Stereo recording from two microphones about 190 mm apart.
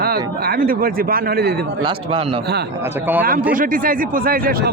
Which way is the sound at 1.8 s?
30° right (ahead or behind).